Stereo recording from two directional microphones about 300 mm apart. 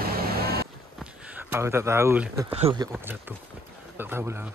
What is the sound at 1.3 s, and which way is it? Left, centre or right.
Speech, centre.